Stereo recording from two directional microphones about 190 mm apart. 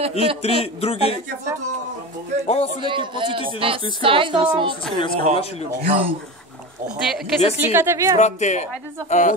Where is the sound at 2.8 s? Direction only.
25° right (ahead or behind).